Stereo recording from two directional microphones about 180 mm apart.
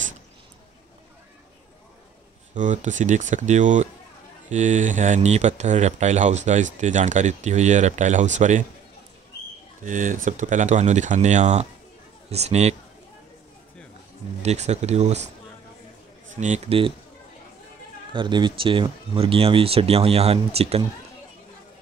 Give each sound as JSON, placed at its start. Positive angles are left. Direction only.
{"t": 2.5, "sound": "speech", "side_deg": -45}
{"t": 9.8, "sound": "speech", "side_deg": -45}
{"t": 14.4, "sound": "speech", "side_deg": -40}
{"t": 16.3, "sound": "speech", "side_deg": -40}
{"t": 18.1, "sound": "speech", "side_deg": -25}